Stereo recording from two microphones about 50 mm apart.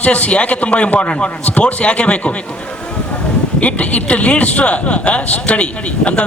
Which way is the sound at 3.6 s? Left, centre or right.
Left.